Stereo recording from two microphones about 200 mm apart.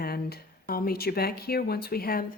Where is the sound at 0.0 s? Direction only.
50° left (ahead or behind).